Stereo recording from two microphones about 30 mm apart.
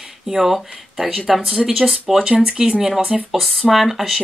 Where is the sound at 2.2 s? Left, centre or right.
Right.